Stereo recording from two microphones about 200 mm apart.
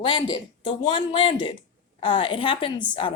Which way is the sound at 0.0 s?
25° left (ahead or behind).